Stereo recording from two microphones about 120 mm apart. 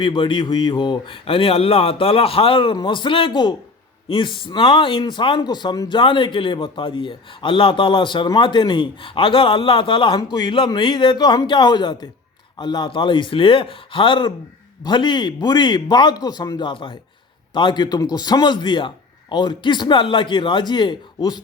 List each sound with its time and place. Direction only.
0.0 s a man's voice: 40° left (ahead or behind)